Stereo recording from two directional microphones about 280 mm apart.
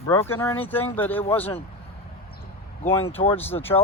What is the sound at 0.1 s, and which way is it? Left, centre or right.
A woman's voice, centre.